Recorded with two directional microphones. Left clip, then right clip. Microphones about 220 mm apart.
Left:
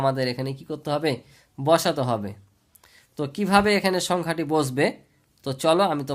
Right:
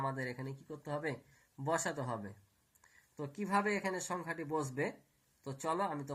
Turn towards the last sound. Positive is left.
turn(degrees=40)  # may be behind; listen again after turning